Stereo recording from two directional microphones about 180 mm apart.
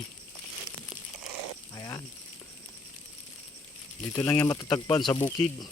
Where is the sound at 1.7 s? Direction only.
20° left (ahead or behind).